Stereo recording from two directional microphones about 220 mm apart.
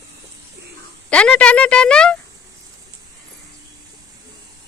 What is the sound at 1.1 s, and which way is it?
Speech, 5° left (ahead or behind).